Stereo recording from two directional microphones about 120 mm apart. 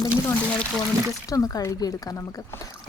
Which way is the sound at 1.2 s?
30° left (ahead or behind).